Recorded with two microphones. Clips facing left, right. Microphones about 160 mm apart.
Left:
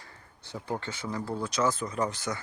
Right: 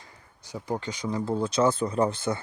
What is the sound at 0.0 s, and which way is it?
Speech, 15° right (ahead or behind).